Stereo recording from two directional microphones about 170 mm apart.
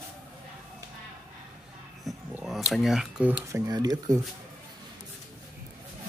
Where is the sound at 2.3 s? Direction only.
5° right (ahead or behind).